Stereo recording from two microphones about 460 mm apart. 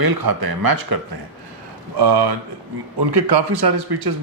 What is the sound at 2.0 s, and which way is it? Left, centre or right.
Speech, right.